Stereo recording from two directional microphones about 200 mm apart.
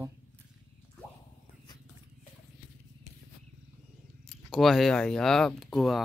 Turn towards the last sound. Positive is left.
turn(degrees=0)  # may be behind; listen again after turning